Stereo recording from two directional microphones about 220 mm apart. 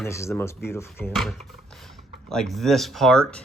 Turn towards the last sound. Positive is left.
turn(degrees=5)  # may be behind; listen again after turning